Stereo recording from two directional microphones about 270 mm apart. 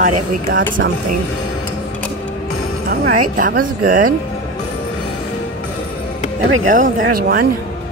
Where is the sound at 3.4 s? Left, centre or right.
Right.